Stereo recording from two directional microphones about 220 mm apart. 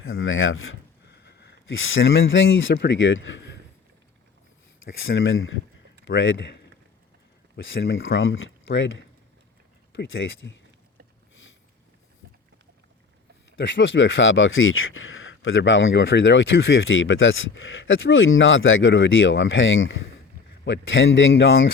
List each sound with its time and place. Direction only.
0.0 s speech: 65° left (ahead or behind)
4.9 s speech: 60° left (ahead or behind)
13.6 s speech: 55° left (ahead or behind)